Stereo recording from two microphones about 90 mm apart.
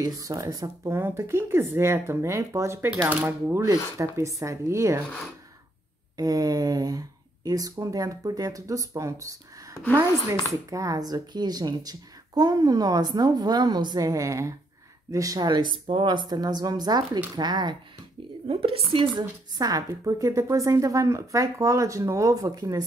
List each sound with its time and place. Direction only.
0.0 s speech: 40° right (ahead or behind)
0.8 s a woman's voice: 25° right (ahead or behind)
6.1 s speech: 45° right (ahead or behind)
18.6 s a woman's voice: 90° right
19.1 s a woman's voice: 45° right (ahead or behind)